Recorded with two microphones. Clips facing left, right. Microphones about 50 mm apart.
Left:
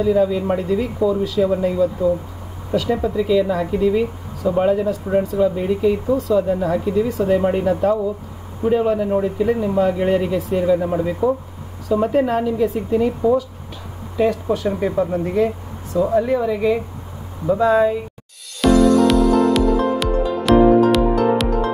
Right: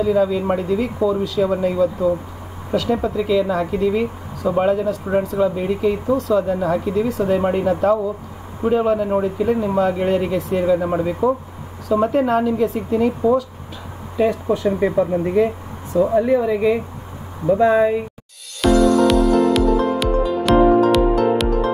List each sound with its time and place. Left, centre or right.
0.0 s speech: centre
10.8 s speech: centre
12.1 s speech: centre
14.1 s speech: centre
18.6 s music: centre